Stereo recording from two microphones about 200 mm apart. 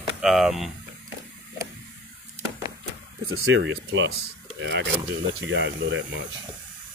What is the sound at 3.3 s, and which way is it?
Speech, 75° right (ahead or behind).